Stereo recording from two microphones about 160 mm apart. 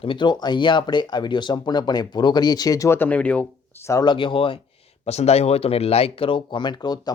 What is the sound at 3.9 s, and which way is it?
Speech, 25° left (ahead or behind).